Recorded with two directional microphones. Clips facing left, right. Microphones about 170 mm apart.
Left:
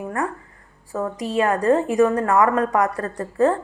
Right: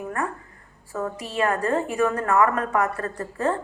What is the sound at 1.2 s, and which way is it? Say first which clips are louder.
A woman's voice: left 5 dB; 35° left (ahead or behind).